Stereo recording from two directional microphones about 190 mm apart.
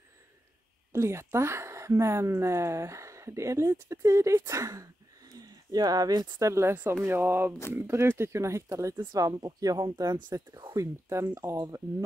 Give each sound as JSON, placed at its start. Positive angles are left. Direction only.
{"t": 0.9, "sound": "a woman's voice", "side_deg": -15}